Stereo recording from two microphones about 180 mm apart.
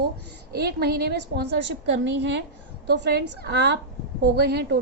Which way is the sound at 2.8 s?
70° right (ahead or behind).